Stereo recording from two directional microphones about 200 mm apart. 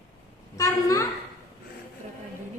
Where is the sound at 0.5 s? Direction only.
15° left (ahead or behind).